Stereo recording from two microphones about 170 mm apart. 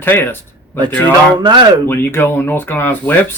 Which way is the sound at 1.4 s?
25° right (ahead or behind).